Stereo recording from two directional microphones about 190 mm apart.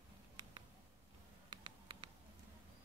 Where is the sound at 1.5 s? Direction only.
25° right (ahead or behind).